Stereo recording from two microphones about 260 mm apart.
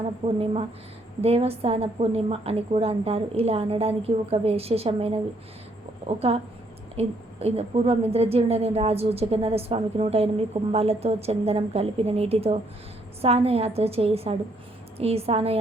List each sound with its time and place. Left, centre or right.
0.2 s a woman's voice: right